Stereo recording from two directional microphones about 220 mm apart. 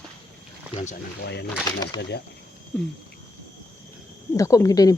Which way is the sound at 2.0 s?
50° left (ahead or behind).